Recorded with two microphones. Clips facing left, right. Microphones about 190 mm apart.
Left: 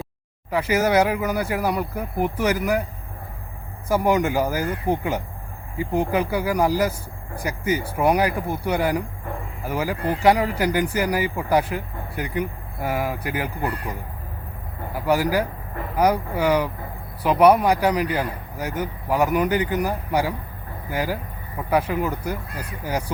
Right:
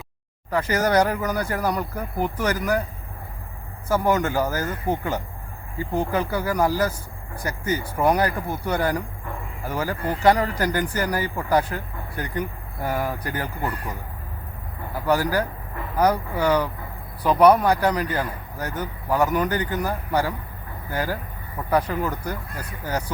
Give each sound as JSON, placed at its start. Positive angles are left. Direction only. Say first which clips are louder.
{"t": 0.5, "sound": "speech", "louder": "left 1 dB", "side_deg": 10}
{"t": 3.8, "sound": "speech", "louder": "left 1 dB", "side_deg": 15}